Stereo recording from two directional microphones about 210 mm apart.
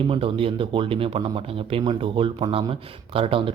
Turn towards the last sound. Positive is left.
turn(degrees=-25)  # may be behind; listen again after turning